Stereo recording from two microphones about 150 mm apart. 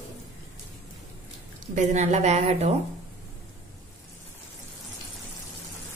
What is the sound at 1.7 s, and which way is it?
Speech, 50° right (ahead or behind).